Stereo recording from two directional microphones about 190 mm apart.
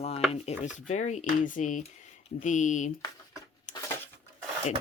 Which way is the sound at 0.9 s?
40° left (ahead or behind).